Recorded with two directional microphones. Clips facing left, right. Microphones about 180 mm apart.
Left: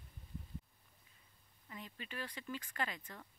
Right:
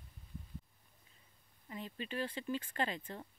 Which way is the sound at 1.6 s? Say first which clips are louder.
Right 6 dB; 25° right (ahead or behind).